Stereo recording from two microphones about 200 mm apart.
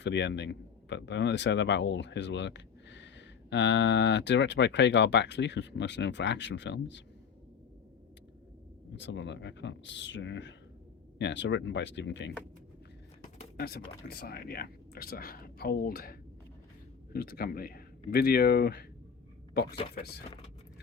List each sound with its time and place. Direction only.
0.0 s a man's voice: 60° left (ahead or behind)
8.9 s a man's voice: 60° left (ahead or behind)
13.6 s speech: 50° left (ahead or behind)
20.0 s speech: 55° left (ahead or behind)